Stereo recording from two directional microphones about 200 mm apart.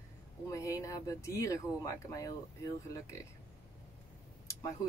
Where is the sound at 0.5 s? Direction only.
15° left (ahead or behind).